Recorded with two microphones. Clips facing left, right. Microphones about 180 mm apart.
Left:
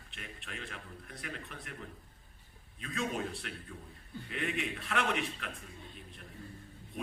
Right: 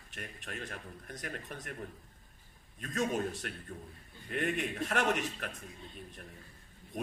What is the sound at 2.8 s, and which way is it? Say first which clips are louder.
A man's voice: right 3 dB; 45° right (ahead or behind).